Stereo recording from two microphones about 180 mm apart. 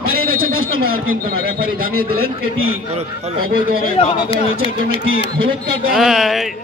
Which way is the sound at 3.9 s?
35° left (ahead or behind).